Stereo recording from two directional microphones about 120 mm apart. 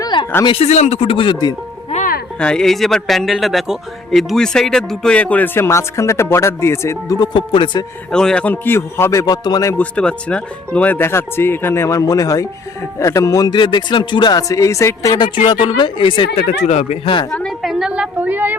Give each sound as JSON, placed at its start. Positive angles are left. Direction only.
{"t": 0.0, "sound": "a sound", "side_deg": 40}
{"t": 0.6, "sound": "speech", "side_deg": 65}
{"t": 2.4, "sound": "speech", "side_deg": 5}
{"t": 7.2, "sound": "speech", "side_deg": 45}
{"t": 8.1, "sound": "speech", "side_deg": 5}
{"t": 9.7, "sound": "speech", "side_deg": 10}
{"t": 15.4, "sound": "speech", "side_deg": 45}
{"t": 16.6, "sound": "speech", "side_deg": 70}
{"t": 17.3, "sound": "a woman's voice", "side_deg": 5}